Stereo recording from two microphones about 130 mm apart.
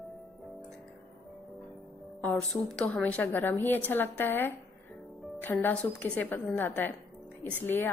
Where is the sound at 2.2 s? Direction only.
10° left (ahead or behind).